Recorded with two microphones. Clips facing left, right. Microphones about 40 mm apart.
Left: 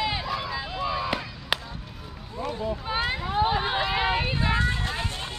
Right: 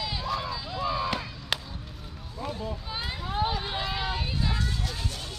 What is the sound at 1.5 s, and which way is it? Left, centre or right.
Music, centre.